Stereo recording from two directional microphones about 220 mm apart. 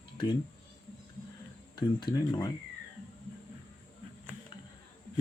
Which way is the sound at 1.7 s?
20° left (ahead or behind).